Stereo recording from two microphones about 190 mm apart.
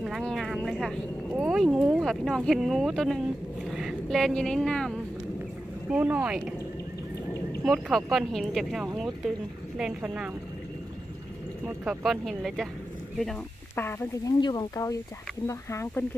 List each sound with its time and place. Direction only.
0.0 s speech: centre (ahead or behind)
7.6 s speech: centre (ahead or behind)
11.6 s speech: 5° right (ahead or behind)
13.8 s speech: 15° left (ahead or behind)